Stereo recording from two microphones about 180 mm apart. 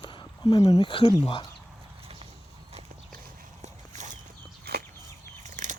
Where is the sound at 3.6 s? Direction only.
40° right (ahead or behind).